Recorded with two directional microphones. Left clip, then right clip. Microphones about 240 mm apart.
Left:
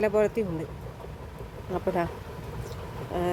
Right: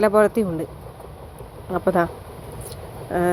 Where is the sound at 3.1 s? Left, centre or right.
Centre.